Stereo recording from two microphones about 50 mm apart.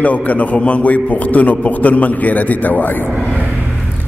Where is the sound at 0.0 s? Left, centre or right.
Left.